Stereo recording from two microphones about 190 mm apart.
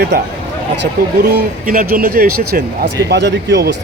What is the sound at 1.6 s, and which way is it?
Speech, 50° right (ahead or behind).